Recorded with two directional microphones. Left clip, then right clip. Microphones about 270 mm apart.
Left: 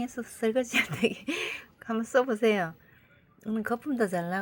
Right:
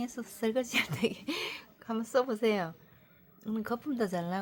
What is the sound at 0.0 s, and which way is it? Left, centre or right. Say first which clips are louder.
Speech: left 4 dB; centre.